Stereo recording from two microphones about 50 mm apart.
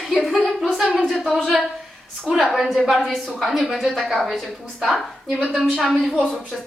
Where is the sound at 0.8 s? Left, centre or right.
Left.